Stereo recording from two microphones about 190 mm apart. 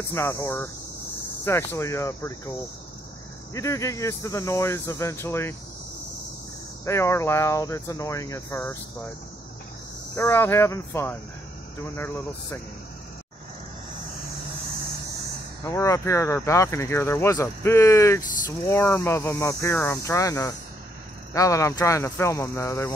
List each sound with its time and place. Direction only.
0.1 s speech: 15° left (ahead or behind)
3.5 s speech: 15° left (ahead or behind)
6.9 s speech: 15° left (ahead or behind)
10.1 s speech: 15° left (ahead or behind)
15.6 s speech: 15° left (ahead or behind)